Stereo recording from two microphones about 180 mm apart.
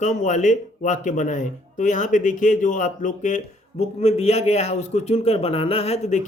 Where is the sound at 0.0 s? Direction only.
45° left (ahead or behind).